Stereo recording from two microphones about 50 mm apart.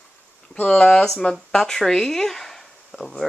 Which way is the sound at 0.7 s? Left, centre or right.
Centre.